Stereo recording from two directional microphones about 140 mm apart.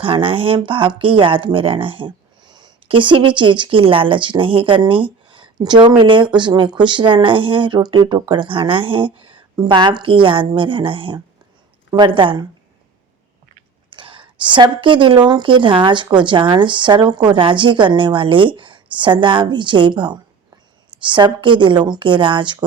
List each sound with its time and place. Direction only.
0.0 s speech: 40° right (ahead or behind)
13.9 s a woman's voice: 35° right (ahead or behind)